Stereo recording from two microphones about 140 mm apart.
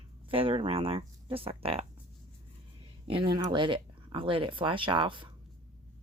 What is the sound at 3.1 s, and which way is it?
Speech, 35° right (ahead or behind).